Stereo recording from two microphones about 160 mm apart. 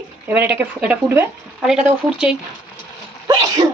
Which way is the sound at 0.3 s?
10° right (ahead or behind).